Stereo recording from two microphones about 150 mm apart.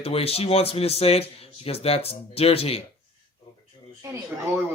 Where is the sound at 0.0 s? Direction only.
40° left (ahead or behind).